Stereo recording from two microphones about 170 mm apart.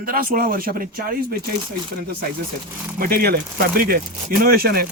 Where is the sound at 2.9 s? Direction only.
60° right (ahead or behind).